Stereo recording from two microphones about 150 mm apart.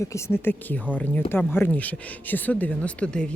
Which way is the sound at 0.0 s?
20° left (ahead or behind).